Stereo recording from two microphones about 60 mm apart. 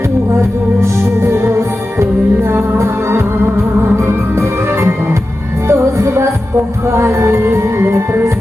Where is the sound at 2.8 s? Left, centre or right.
Right.